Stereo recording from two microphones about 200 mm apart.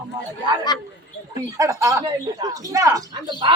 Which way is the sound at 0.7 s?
20° left (ahead or behind).